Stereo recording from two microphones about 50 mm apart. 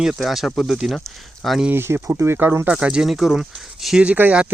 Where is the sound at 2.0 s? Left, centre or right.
Right.